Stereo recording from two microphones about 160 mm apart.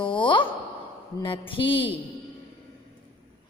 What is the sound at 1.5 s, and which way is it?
Speech, 35° left (ahead or behind).